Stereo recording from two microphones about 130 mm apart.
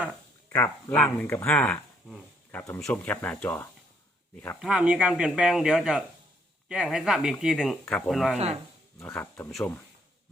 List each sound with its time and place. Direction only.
0.5 s speech: 15° left (ahead or behind)
2.8 s speech: 10° left (ahead or behind)
4.6 s speech: 5° right (ahead or behind)
9.1 s speech: 15° left (ahead or behind)